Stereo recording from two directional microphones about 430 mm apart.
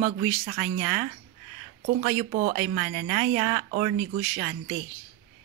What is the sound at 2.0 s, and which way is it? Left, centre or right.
Speech, centre.